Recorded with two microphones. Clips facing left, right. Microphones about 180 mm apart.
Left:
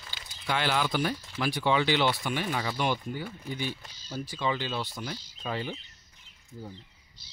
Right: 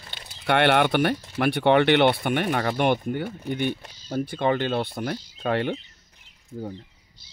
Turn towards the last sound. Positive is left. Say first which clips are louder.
# right 9 dB
turn(degrees=-60)  # may be behind; listen again after turning